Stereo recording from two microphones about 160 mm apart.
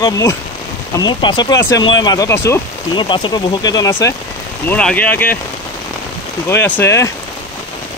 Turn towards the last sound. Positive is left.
turn(degrees=20)  # may be behind; listen again after turning